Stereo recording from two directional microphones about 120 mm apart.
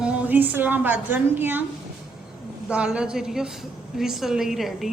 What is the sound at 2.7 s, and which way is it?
A woman's voice, 10° right (ahead or behind).